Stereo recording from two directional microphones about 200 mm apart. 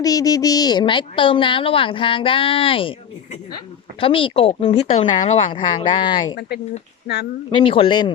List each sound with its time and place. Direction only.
0.0 s speech: 20° left (ahead or behind)
4.0 s speech: 25° left (ahead or behind)
7.5 s speech: 25° left (ahead or behind)